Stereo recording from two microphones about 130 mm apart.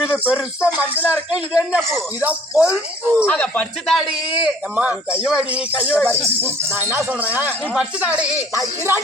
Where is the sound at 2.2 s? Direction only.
10° right (ahead or behind).